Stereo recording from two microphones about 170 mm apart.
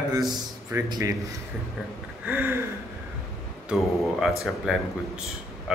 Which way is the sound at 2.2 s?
10° right (ahead or behind).